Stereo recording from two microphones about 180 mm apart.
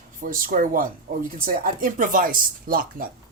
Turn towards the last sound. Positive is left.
turn(degrees=-50)  # may be behind; listen again after turning